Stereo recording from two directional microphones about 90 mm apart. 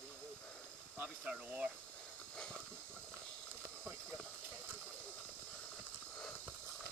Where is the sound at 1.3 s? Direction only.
15° right (ahead or behind).